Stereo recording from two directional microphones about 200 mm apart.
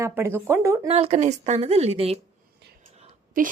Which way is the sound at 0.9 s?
35° right (ahead or behind).